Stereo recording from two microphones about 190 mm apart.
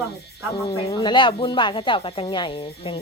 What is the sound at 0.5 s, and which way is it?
Speech, 15° left (ahead or behind).